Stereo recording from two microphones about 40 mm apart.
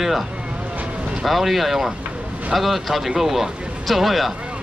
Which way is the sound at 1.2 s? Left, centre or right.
Centre.